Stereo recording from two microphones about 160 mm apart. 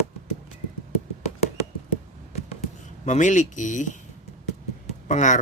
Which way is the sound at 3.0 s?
50° left (ahead or behind).